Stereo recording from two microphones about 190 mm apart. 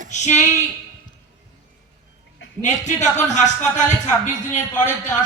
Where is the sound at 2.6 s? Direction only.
40° left (ahead or behind).